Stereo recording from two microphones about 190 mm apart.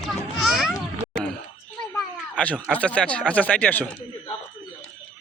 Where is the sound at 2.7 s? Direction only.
5° left (ahead or behind).